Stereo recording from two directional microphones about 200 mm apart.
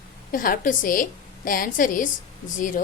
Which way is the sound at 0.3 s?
45° left (ahead or behind).